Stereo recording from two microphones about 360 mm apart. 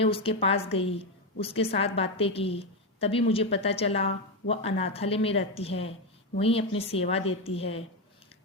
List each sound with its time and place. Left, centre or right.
0.0 s a woman's voice: centre